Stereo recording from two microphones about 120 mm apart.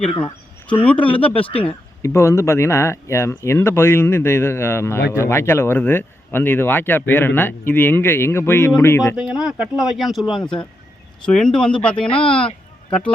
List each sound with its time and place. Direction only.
0.8 s speech: 10° left (ahead or behind)
1.5 s speech: 50° left (ahead or behind)
2.0 s speech: 25° left (ahead or behind)
9.1 s speech: 5° right (ahead or behind)
11.3 s speech: 5° left (ahead or behind)